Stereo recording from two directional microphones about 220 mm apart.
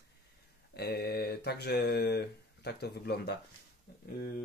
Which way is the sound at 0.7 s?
45° left (ahead or behind).